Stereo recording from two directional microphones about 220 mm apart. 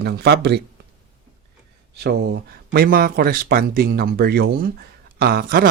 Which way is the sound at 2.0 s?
50° right (ahead or behind).